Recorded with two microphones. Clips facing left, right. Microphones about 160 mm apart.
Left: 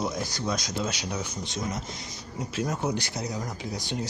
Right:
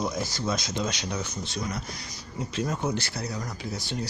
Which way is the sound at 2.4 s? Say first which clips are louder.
Even; 10° left (ahead or behind).